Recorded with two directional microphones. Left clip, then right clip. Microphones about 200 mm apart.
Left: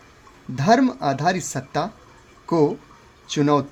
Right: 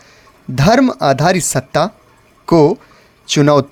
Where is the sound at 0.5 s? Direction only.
45° right (ahead or behind).